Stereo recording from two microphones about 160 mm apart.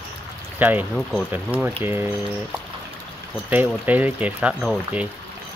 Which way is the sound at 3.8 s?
10° right (ahead or behind).